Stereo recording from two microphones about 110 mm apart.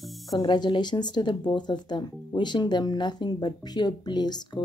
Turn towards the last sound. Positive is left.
turn(degrees=40)  # may be behind; listen again after turning